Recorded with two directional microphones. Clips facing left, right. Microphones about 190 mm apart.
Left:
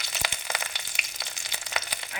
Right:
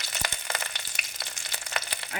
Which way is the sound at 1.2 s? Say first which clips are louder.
Right 1 dB; 15° left (ahead or behind).